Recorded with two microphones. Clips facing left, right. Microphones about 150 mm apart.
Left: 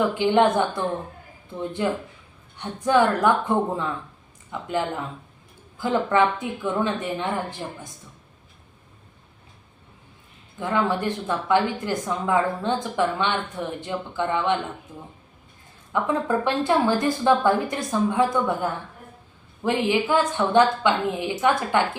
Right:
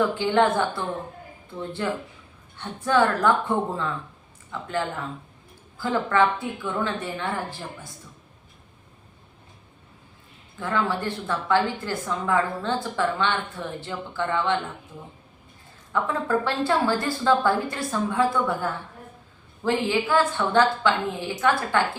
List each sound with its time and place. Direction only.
0.2 s speech: 20° left (ahead or behind)
5.7 s speech: 20° left (ahead or behind)
10.6 s speech: 20° left (ahead or behind)
15.9 s speech: 20° left (ahead or behind)